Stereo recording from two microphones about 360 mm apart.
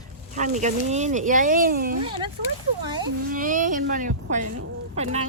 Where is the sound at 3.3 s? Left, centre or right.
Right.